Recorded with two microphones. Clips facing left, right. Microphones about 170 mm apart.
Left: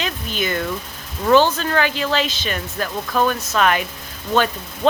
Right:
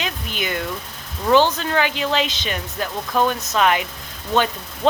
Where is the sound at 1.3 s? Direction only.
15° right (ahead or behind).